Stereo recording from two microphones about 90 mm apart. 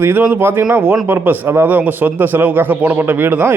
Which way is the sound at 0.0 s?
20° right (ahead or behind).